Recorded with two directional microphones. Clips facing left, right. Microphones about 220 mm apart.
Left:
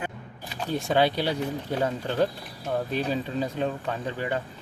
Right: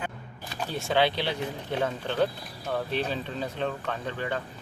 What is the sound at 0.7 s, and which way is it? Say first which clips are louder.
Speech: left 2 dB; 45° left (ahead or behind).